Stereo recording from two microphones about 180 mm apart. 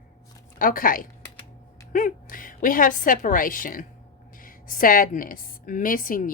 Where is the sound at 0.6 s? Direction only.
50° left (ahead or behind).